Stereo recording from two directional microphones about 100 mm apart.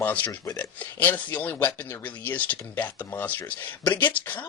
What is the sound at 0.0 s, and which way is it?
Speech, 15° left (ahead or behind).